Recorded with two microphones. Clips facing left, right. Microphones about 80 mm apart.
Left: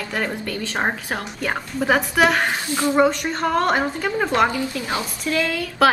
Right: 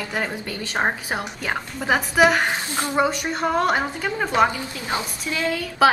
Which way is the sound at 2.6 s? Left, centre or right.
Right.